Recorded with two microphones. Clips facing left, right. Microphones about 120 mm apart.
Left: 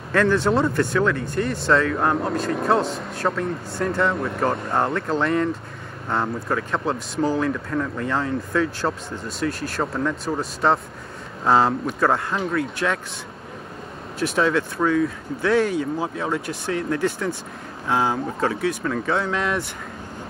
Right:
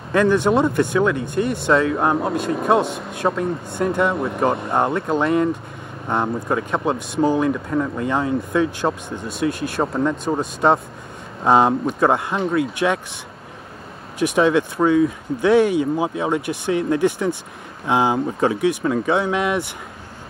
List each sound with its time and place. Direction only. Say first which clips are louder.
0.1 s speech: right 3 dB; 15° right (ahead or behind)
14.2 s speech: right 4 dB; 15° right (ahead or behind)